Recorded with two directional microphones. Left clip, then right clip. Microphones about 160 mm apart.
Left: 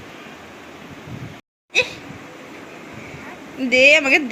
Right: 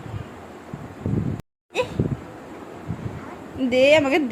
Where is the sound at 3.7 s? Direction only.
10° right (ahead or behind).